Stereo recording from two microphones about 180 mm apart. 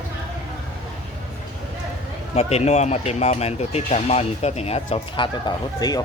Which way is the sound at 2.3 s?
35° left (ahead or behind).